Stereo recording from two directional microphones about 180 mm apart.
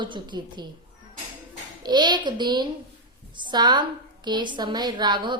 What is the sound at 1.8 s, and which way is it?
A woman's voice, 25° right (ahead or behind).